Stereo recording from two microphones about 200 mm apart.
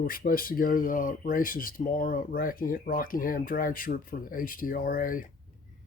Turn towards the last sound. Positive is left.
turn(degrees=45)  # may be behind; listen again after turning